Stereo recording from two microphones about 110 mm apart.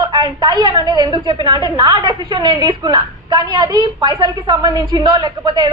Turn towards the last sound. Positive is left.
turn(degrees=-40)  # may be behind; listen again after turning